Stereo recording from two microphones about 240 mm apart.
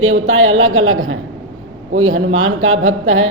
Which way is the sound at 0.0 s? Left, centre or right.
Right.